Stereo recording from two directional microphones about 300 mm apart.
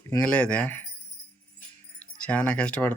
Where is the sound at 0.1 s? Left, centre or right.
Centre.